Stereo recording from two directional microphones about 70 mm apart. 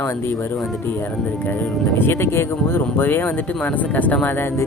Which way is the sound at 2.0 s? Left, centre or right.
Left.